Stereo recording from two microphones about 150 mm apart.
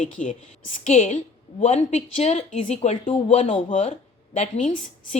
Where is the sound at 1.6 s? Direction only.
45° left (ahead or behind).